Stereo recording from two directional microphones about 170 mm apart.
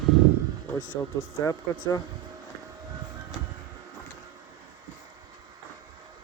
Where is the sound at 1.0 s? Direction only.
15° left (ahead or behind).